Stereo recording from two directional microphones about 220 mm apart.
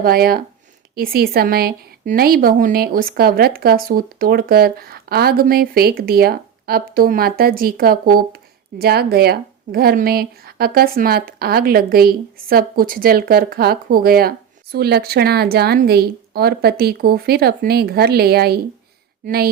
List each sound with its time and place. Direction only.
0.0 s speech: 45° right (ahead or behind)